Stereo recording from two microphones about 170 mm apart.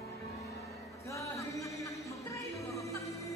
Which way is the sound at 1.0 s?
20° left (ahead or behind).